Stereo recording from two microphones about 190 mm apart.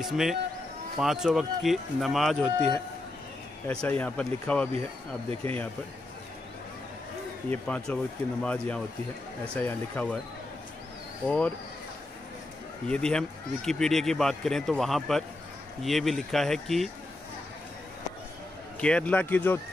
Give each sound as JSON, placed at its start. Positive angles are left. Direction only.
{"t": 0.0, "sound": "speech", "side_deg": 0}
{"t": 3.6, "sound": "speech", "side_deg": 5}
{"t": 5.3, "sound": "speech", "side_deg": -30}
{"t": 7.4, "sound": "speech", "side_deg": 5}
{"t": 11.2, "sound": "speech", "side_deg": 5}
{"t": 12.8, "sound": "speech", "side_deg": 5}
{"t": 18.8, "sound": "speech", "side_deg": 5}